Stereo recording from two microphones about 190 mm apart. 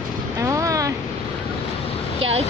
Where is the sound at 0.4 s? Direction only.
15° right (ahead or behind).